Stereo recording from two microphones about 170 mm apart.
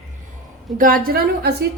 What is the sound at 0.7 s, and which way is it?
Speech, 55° right (ahead or behind).